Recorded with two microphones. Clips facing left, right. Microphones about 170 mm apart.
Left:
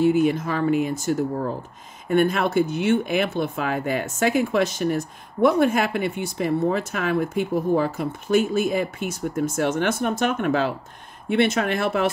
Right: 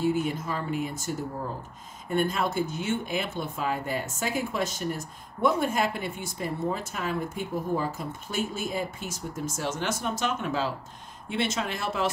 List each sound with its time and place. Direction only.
0.0 s speech: 80° left; by 12.1 s 60° left (ahead or behind)